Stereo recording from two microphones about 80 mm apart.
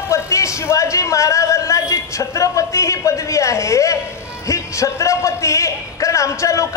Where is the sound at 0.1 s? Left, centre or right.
Left.